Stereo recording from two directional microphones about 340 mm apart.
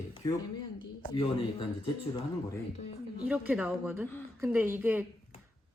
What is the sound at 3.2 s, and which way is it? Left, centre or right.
Speech, centre.